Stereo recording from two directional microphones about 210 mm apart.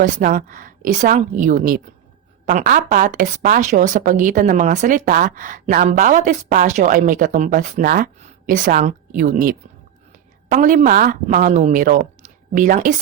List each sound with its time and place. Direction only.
0.0 s speech: 40° right (ahead or behind)